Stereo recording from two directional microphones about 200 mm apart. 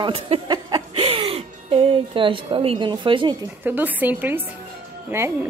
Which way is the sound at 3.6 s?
10° right (ahead or behind).